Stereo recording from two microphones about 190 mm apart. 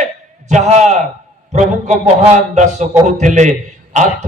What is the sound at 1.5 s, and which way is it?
A man's voice, 40° right (ahead or behind).